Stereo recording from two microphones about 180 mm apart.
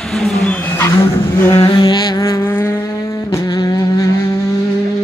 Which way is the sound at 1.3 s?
15° left (ahead or behind).